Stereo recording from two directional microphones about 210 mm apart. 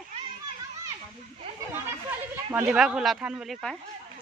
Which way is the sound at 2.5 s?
5° right (ahead or behind).